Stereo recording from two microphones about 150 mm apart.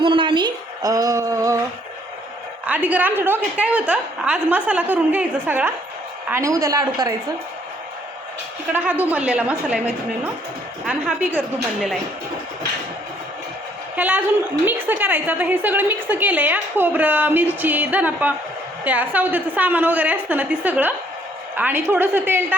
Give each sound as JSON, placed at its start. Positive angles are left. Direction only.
{"t": 0.0, "sound": "speech", "side_deg": -35}
{"t": 2.6, "sound": "a woman's voice", "side_deg": -10}
{"t": 8.7, "sound": "a woman's voice", "side_deg": -10}
{"t": 13.9, "sound": "a woman's voice", "side_deg": -10}